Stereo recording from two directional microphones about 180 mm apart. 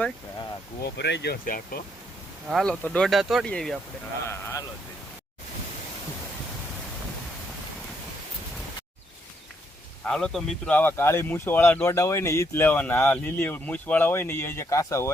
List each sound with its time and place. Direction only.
0.8 s speech: 65° left (ahead or behind)
2.5 s speech: 5° left (ahead or behind)
4.3 s speech: 15° left (ahead or behind)
10.0 s speech: 5° left (ahead or behind)